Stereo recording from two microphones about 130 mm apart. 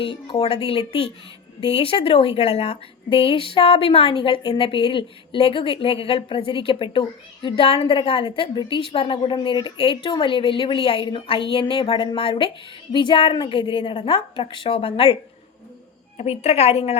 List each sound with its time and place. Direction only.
0.0 s a woman's voice: 45° left (ahead or behind)